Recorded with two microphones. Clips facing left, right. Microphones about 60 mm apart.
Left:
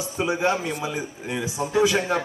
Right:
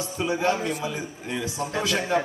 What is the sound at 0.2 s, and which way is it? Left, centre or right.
A man's voice, centre.